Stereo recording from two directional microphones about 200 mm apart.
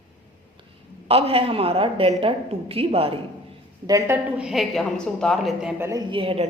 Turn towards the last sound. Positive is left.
turn(degrees=-25)  # may be behind; listen again after turning